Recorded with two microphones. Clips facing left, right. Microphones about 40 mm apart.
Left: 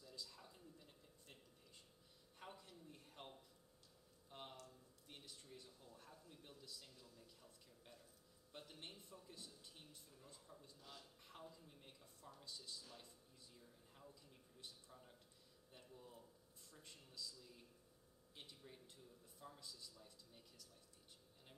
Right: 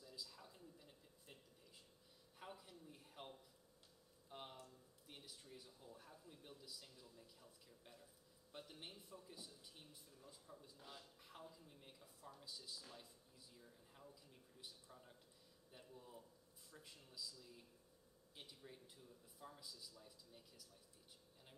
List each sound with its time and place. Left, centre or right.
0.0 s a sound: centre
6.6 s speech: centre
10.8 s a man's voice: centre
11.2 s a man's voice: centre